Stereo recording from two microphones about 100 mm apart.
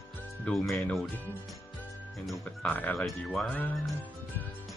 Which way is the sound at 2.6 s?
15° left (ahead or behind).